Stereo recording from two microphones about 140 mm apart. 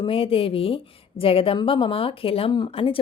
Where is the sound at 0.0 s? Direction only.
40° left (ahead or behind).